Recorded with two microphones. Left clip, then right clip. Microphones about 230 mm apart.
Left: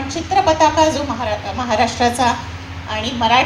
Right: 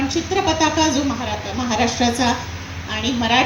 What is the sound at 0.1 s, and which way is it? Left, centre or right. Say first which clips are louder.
A woman's voice: left 4 dB; left.